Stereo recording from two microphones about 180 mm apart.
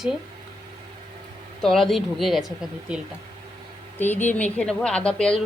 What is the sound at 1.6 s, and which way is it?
Speech, centre (ahead or behind).